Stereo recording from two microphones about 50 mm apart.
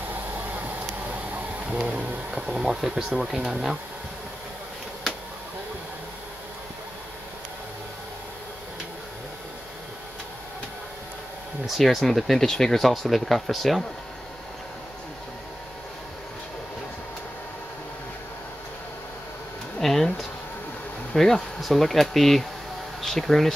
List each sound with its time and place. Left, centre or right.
0.1 s vehicle: right
1.7 s a sound: right
2.3 s speech: centre
11.6 s speech: centre
19.8 s a sound: centre
21.1 s speech: centre